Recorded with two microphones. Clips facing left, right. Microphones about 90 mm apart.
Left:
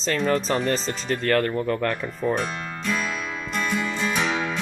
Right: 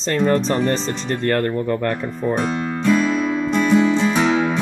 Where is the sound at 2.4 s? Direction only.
30° right (ahead or behind).